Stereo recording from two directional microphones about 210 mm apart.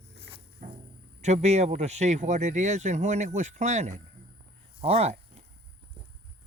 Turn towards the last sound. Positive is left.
turn(degrees=-30)  # may be behind; listen again after turning